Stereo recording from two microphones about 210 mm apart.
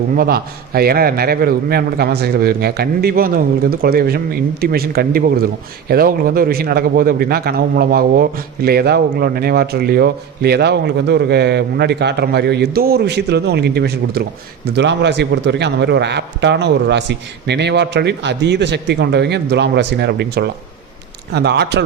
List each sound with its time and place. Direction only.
0.2 s a man's voice: 45° right (ahead or behind)